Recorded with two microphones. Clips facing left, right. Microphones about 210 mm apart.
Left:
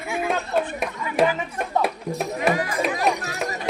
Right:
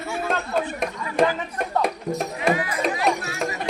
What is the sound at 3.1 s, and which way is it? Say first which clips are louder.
Music: even; 35° left (ahead or behind).